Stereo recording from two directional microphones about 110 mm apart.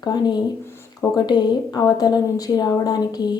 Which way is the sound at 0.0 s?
40° left (ahead or behind).